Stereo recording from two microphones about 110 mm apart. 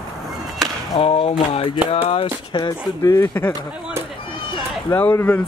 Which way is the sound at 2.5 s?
35° left (ahead or behind).